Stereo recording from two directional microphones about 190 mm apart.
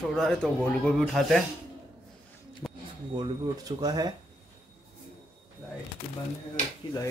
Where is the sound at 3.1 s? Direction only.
20° right (ahead or behind).